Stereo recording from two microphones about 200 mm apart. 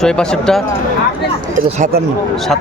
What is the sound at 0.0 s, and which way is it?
Speech, 5° left (ahead or behind).